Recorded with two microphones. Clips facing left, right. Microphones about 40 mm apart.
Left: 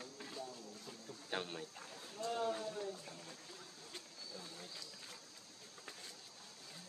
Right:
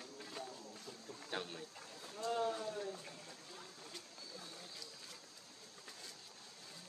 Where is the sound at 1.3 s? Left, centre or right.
Centre.